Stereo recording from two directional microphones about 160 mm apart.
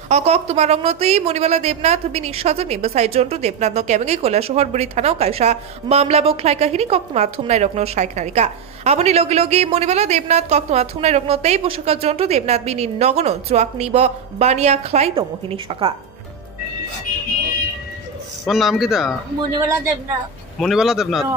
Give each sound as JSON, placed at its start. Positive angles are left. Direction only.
{"t": 0.1, "sound": "a woman's voice", "side_deg": -45}
{"t": 18.4, "sound": "a man's voice", "side_deg": 0}
{"t": 20.5, "sound": "a man's voice", "side_deg": 0}